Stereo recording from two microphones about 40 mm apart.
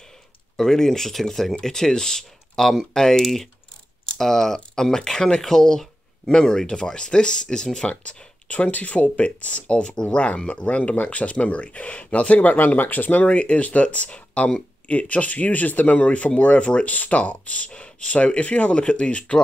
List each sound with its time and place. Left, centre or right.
0.6 s speech: centre; by 13.3 s left
13.3 s speech: left